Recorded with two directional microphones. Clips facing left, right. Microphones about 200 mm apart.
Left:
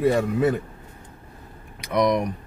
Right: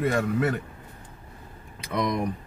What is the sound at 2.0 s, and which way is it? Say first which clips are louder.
Speech: left 6 dB; 90° left.